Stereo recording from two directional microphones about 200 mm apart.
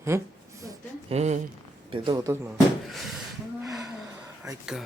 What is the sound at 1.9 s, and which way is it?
Speech, 20° right (ahead or behind).